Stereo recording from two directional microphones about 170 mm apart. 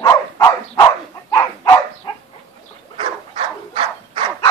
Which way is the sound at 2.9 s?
30° right (ahead or behind).